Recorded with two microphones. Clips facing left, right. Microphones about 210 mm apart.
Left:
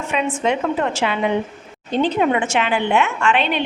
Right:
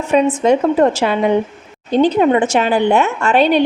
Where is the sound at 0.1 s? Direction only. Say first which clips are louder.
Right 8 dB; 35° right (ahead or behind).